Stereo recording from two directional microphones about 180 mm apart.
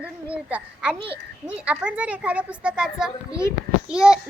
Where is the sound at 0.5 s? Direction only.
5° right (ahead or behind).